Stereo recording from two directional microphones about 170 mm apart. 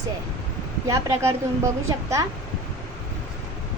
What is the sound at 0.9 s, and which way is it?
Speech, 15° right (ahead or behind).